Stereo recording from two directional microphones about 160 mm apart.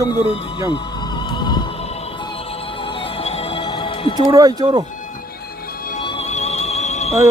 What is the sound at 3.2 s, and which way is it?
Music, 40° left (ahead or behind).